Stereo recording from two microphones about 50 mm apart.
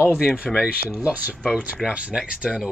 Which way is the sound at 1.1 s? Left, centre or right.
Right.